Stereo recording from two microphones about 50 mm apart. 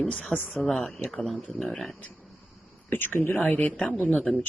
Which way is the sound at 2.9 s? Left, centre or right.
Left.